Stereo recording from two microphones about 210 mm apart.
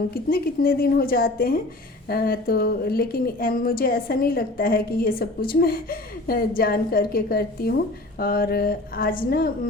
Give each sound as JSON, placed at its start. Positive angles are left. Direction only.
{"t": 0.1, "sound": "a woman's voice", "side_deg": 45}